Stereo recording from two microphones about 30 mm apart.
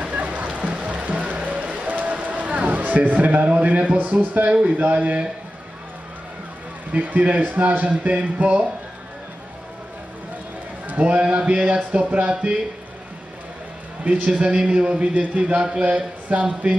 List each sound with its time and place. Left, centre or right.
0.1 s a sound: right
0.5 s music: right
3.6 s speech: right
4.6 s a man's voice: right
4.8 s speech: right
7.0 s speech: right
8.0 s speech: right
11.0 s a man's voice: right
12.3 s a man's voice: right
14.1 s a man's voice: right
14.4 s a man's voice: right
15.1 s a man's voice: right